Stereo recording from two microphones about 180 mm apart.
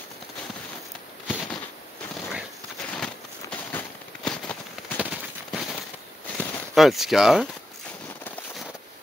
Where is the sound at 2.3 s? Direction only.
5° left (ahead or behind).